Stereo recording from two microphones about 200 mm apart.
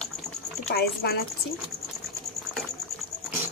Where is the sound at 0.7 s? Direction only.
50° left (ahead or behind).